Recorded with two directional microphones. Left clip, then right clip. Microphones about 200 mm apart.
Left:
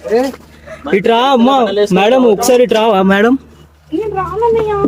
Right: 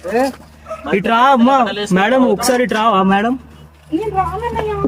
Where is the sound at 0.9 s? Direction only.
10° left (ahead or behind); by 3.3 s 30° left (ahead or behind).